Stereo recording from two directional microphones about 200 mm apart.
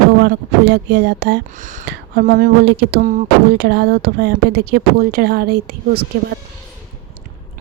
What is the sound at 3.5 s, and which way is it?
Speech, 55° right (ahead or behind).